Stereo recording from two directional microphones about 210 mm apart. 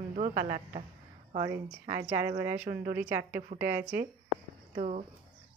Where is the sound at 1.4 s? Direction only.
15° right (ahead or behind).